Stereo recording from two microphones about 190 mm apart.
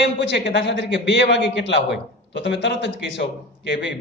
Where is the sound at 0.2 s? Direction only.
65° left (ahead or behind).